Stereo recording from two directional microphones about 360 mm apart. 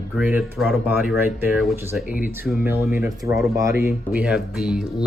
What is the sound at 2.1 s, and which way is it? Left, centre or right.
Speech, left.